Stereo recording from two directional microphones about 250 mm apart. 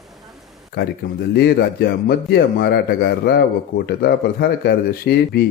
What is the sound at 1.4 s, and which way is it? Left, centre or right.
A man's voice, left.